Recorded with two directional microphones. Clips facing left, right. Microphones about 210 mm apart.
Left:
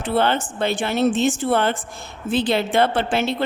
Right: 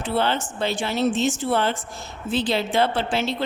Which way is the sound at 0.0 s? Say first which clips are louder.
Left 3 dB; 55° left (ahead or behind).